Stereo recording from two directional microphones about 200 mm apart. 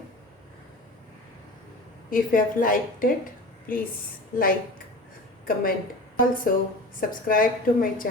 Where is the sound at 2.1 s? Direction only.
45° left (ahead or behind).